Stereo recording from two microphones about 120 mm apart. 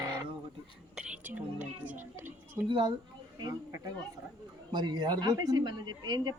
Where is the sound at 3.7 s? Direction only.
30° right (ahead or behind).